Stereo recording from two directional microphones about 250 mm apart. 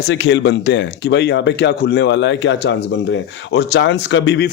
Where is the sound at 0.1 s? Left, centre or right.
Left.